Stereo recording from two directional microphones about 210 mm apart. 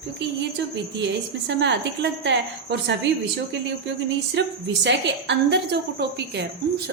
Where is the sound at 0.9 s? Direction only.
55° right (ahead or behind).